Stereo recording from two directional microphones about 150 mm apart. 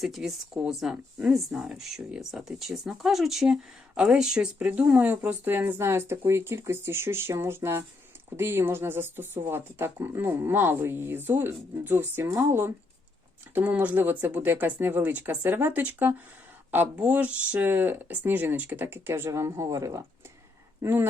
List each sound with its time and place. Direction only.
0.0 s speech: centre (ahead or behind)